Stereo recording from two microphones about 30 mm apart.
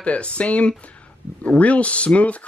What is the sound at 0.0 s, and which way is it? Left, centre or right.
Speech, left.